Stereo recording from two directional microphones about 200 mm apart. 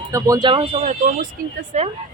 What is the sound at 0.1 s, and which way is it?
Speech, 20° right (ahead or behind).